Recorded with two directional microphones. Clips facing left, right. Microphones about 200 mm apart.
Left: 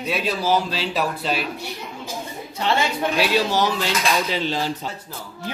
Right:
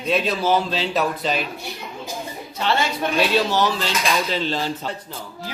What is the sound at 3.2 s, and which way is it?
Dishes, 15° left (ahead or behind).